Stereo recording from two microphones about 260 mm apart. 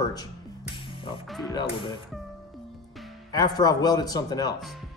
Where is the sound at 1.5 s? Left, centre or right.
Centre.